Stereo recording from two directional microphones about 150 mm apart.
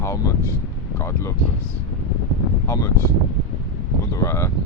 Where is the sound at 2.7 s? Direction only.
20° left (ahead or behind).